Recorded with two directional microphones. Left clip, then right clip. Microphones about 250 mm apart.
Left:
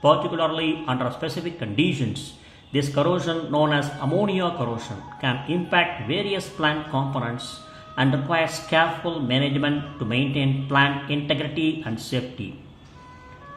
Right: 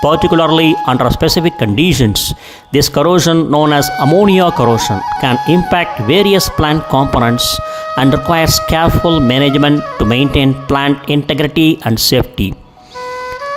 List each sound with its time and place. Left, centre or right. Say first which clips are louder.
0.0 s speech: right 9 dB; right